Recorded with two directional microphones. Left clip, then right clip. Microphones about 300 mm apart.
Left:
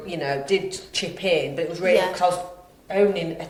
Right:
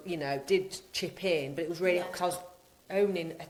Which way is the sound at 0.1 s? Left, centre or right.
Right.